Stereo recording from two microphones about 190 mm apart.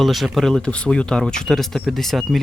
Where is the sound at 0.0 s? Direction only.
Centre (ahead or behind).